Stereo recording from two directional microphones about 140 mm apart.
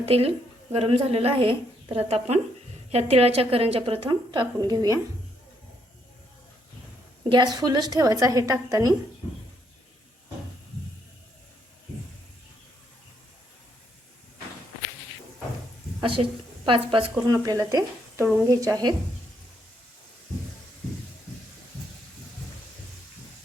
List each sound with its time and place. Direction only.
0.0 s a woman's voice: 45° right (ahead or behind); by 4.9 s 30° right (ahead or behind)
7.3 s a woman's voice: 30° right (ahead or behind)
16.0 s a woman's voice: 40° right (ahead or behind)
17.2 s a woman's voice: 25° right (ahead or behind)